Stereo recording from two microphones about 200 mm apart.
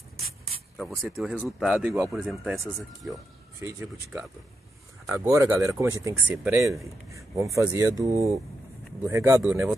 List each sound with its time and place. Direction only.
0.8 s speech: centre (ahead or behind)